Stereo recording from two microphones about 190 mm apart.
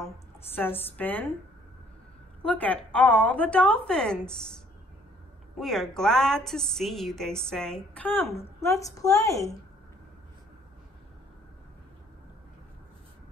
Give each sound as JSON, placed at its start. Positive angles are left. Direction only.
{"t": 0.0, "sound": "a woman's voice", "side_deg": 10}
{"t": 2.4, "sound": "a woman's voice", "side_deg": 5}
{"t": 5.6, "sound": "a woman's voice", "side_deg": 0}